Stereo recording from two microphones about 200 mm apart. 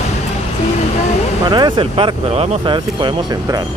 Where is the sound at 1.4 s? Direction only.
20° right (ahead or behind).